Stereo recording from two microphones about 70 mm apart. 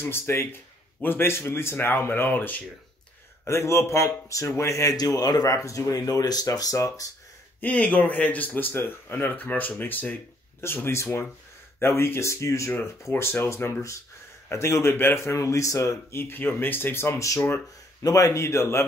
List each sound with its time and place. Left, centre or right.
0.0 s speech: left
3.4 s speech: left
4.9 s speech: left
5.5 s speech: left
7.6 s speech: left
13.1 s speech: left
15.3 s speech: left